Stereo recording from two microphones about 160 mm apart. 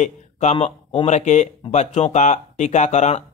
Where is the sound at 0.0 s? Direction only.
45° left (ahead or behind).